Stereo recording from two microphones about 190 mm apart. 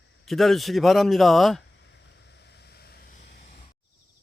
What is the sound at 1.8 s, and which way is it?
Vehicle, 65° left (ahead or behind).